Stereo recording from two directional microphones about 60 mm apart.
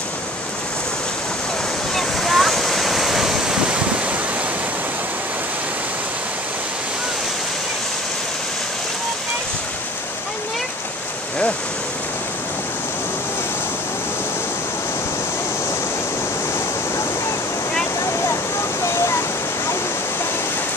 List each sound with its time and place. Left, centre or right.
2.0 s waves: centre
18.0 s waterfall: left